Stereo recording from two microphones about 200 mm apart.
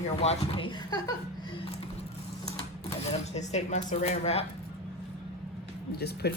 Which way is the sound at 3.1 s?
35° left (ahead or behind).